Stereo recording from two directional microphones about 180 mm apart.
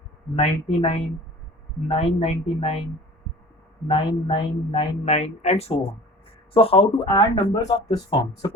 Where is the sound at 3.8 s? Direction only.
30° left (ahead or behind).